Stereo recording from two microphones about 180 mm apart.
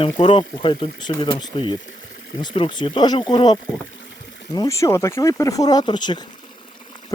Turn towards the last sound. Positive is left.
turn(degrees=25)  # may be behind; listen again after turning